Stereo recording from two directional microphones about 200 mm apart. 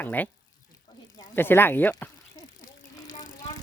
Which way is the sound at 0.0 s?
10° left (ahead or behind).